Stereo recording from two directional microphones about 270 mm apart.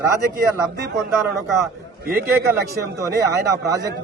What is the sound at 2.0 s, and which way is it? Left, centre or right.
Speech, right.